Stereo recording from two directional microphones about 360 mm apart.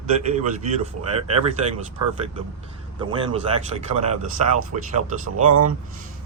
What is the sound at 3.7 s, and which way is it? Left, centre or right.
Speech, right.